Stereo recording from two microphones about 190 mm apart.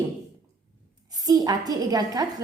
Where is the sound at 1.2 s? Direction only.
20° right (ahead or behind).